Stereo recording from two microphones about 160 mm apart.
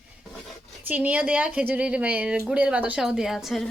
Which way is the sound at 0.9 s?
10° right (ahead or behind).